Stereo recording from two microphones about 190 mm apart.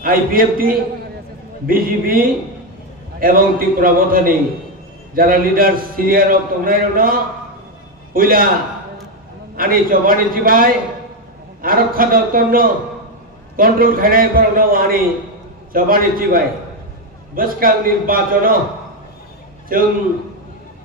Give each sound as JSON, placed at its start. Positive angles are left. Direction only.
{"t": 0.0, "sound": "a man's voice", "side_deg": -50}
{"t": 9.6, "sound": "a man's voice", "side_deg": -50}
{"t": 19.7, "sound": "a man's voice", "side_deg": -50}